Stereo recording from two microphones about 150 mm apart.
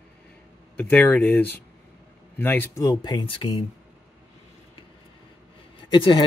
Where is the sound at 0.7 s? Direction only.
10° left (ahead or behind).